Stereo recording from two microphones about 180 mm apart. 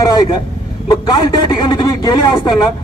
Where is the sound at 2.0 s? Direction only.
25° left (ahead or behind).